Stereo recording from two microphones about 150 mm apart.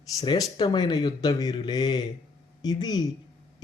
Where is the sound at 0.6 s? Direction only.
30° left (ahead or behind).